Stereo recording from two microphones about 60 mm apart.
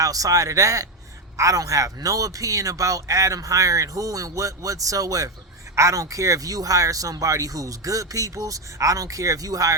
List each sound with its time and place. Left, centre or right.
0.0 s speech: right